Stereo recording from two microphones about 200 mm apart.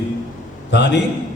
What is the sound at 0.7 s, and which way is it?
Speech, 60° left (ahead or behind).